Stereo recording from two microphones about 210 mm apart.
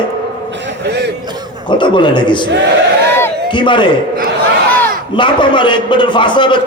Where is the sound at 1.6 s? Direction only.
20° left (ahead or behind).